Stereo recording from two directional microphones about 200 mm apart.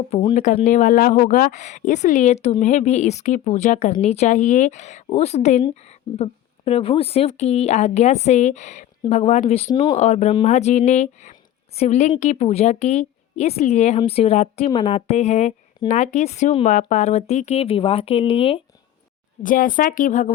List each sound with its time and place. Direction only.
0.1 s speech: 25° left (ahead or behind)
0.3 s a woman's voice: 40° left (ahead or behind)
19.4 s speech: 40° left (ahead or behind)